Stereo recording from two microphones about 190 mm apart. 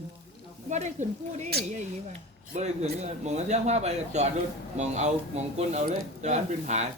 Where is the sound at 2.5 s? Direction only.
35° right (ahead or behind).